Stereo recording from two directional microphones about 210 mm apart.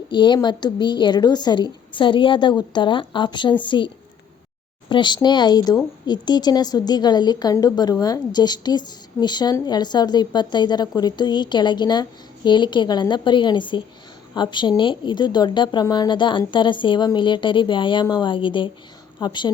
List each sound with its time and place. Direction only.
0.1 s a woman's voice: 20° left (ahead or behind)